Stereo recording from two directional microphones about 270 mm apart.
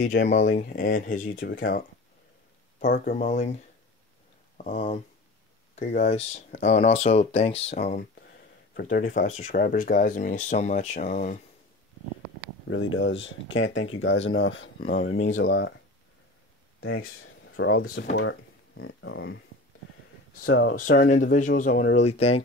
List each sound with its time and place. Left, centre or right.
0.0 s speech: left
1.3 s speech: left
2.8 s speech: left
4.6 s speech: left
12.6 s speech: left
15.0 s speech: left
15.3 s speech: left
17.2 s speech: left
20.4 s speech: left
20.7 s speech: left